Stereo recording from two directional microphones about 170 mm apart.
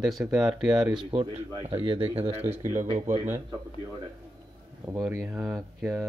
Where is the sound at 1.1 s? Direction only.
35° right (ahead or behind).